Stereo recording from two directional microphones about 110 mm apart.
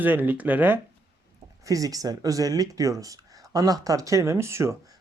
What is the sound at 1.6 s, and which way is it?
Speech, 30° right (ahead or behind).